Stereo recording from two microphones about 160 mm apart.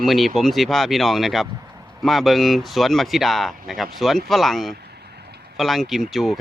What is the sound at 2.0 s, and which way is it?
Speech, centre (ahead or behind).